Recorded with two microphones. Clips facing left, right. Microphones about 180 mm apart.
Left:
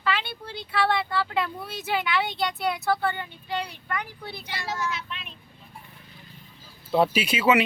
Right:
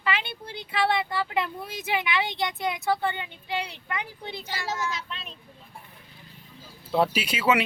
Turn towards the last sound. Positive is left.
turn(degrees=10)  # may be behind; listen again after turning